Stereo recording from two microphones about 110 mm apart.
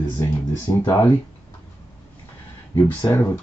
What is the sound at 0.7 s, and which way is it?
Speech, 35° left (ahead or behind).